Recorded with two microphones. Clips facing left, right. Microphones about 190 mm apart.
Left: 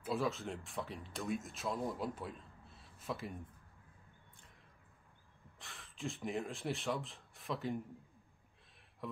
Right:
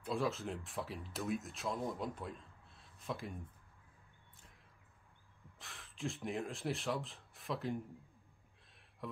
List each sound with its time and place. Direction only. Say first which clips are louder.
0.0 s speech: even; centre (ahead or behind)
5.6 s speech: right 1 dB; centre (ahead or behind)
9.0 s a sound: left 1 dB; centre (ahead or behind)